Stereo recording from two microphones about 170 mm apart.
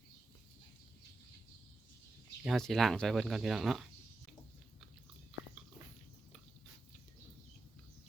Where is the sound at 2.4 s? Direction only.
Centre (ahead or behind).